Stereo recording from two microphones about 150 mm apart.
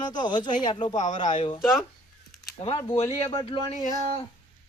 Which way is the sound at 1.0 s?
55° left (ahead or behind).